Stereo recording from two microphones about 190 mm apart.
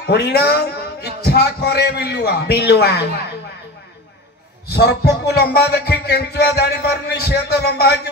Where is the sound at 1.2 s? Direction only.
55° left (ahead or behind).